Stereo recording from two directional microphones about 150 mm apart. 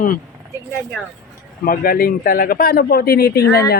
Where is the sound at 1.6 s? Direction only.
75° left (ahead or behind); by 3.4 s 90° left.